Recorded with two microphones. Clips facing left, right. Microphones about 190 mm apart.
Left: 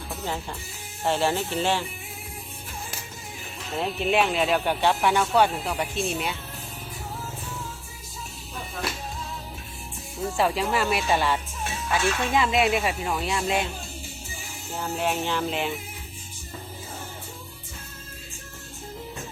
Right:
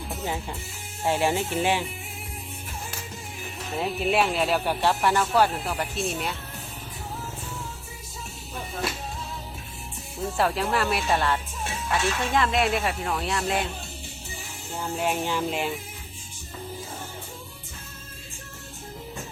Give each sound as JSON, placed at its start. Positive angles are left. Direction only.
{"t": 0.1, "sound": "music", "side_deg": -15}
{"t": 1.0, "sound": "speech", "side_deg": -10}
{"t": 3.8, "sound": "speech", "side_deg": -5}
{"t": 10.3, "sound": "speech", "side_deg": 0}
{"t": 14.9, "sound": "speech", "side_deg": -5}